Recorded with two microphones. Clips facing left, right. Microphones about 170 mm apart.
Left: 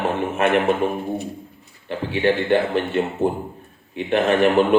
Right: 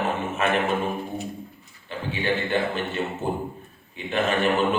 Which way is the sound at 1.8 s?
65° left (ahead or behind).